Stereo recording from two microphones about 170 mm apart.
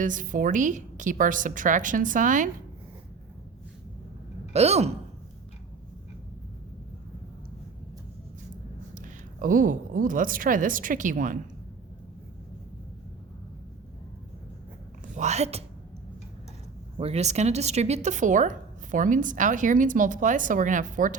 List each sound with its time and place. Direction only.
0.0 s speech: 50° right (ahead or behind)
4.5 s a woman's voice: 40° right (ahead or behind)
9.0 s a woman's voice: 50° right (ahead or behind)
15.1 s a woman's voice: 40° right (ahead or behind)
17.0 s speech: 40° right (ahead or behind)